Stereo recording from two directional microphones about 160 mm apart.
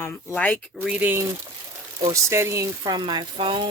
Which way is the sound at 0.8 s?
10° right (ahead or behind).